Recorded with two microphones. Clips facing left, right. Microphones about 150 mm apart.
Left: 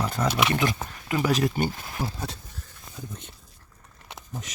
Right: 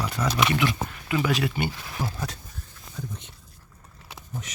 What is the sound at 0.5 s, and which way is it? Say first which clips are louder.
Speech: right 1 dB; 40° left (ahead or behind).